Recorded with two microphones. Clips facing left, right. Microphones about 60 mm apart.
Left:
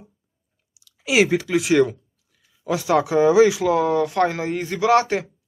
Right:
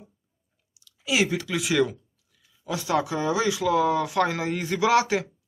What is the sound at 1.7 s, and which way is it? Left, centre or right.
Speech, centre.